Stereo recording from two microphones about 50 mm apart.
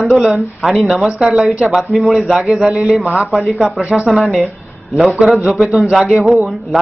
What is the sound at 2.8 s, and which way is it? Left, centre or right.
Speech, centre.